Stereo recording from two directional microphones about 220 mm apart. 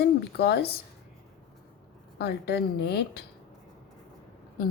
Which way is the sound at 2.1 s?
50° left (ahead or behind).